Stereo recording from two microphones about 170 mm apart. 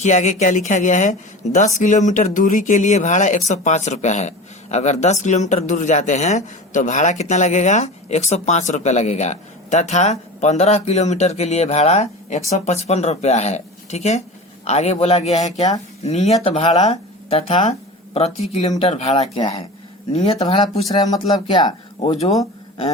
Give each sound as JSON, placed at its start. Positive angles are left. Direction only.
{"t": 0.0, "sound": "speech", "side_deg": 45}
{"t": 20.6, "sound": "speech", "side_deg": 25}